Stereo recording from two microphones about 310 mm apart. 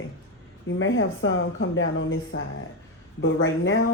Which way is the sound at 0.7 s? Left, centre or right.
Left.